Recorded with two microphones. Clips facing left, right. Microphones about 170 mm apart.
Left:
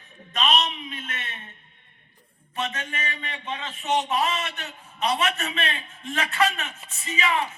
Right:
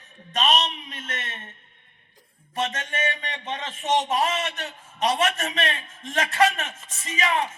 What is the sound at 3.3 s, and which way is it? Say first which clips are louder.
Speech: right 1 dB; 45° right (ahead or behind).